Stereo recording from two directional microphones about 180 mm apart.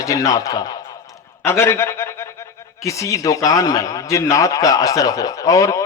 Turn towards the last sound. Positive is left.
turn(degrees=15)  # may be behind; listen again after turning